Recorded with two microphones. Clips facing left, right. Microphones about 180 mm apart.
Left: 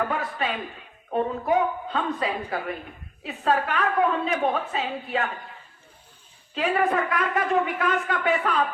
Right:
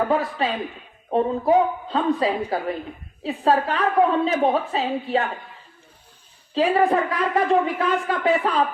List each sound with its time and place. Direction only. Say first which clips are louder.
0.1 s a man's voice: right 6 dB; 30° right (ahead or behind)
6.5 s a man's voice: right 5 dB; 30° right (ahead or behind)